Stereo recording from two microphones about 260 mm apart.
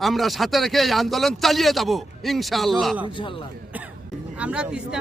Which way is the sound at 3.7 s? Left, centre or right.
Centre.